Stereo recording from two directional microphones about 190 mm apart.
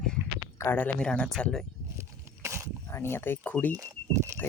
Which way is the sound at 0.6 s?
10° left (ahead or behind).